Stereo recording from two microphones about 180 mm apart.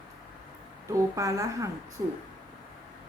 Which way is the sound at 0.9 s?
20° right (ahead or behind).